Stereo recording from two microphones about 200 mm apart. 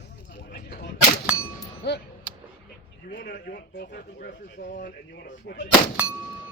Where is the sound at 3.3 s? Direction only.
50° left (ahead or behind).